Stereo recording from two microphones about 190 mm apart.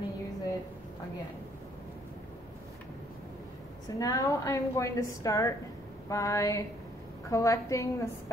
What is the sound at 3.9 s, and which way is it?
A woman's voice, 15° left (ahead or behind).